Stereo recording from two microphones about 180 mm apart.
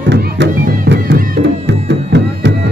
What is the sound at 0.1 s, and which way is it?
Music, 75° right (ahead or behind).